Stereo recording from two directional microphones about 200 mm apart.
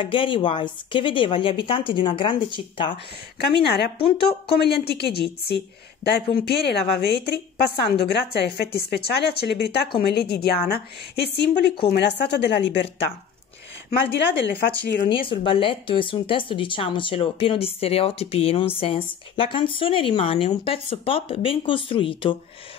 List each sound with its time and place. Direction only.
0.0 s speech: 25° left (ahead or behind)
3.3 s a woman's voice: 55° left (ahead or behind)
4.0 s speech: 30° left (ahead or behind)
4.6 s a woman's voice: 55° left (ahead or behind)
13.8 s a woman's voice: 50° left (ahead or behind)
15.0 s speech: 25° left (ahead or behind)